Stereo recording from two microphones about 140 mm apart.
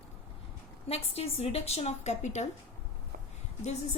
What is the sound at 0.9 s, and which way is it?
A woman's voice, 45° left (ahead or behind).